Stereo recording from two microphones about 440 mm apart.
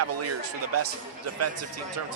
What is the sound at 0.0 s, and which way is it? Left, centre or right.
Speech, right.